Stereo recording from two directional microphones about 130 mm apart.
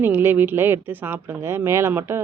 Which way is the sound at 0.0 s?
15° right (ahead or behind).